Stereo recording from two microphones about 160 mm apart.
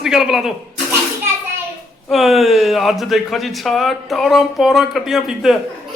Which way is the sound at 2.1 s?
Centre (ahead or behind).